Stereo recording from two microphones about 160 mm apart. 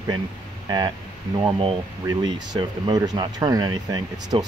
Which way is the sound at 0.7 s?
25° right (ahead or behind).